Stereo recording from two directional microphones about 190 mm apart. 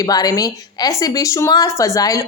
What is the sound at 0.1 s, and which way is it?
A woman's voice, 20° left (ahead or behind).